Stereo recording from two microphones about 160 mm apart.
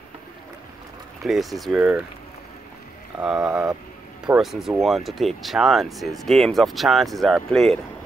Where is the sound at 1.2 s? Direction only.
Centre (ahead or behind).